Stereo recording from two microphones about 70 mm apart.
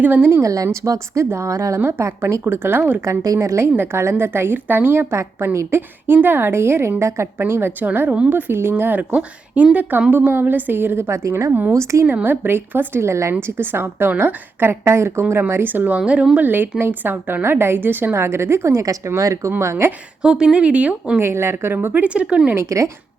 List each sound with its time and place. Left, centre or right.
0.0 s a woman's voice: right
0.4 s a woman's voice: right
1.8 s a woman's voice: right
3.0 s a woman's voice: right
4.2 s a woman's voice: right
12.0 s a woman's voice: right
16.0 s speech: centre
16.5 s a woman's voice: right
19.5 s a woman's voice: right
20.2 s speech: centre
21.2 s a woman's voice: right
22.0 s speech: centre
22.6 s a woman's voice: right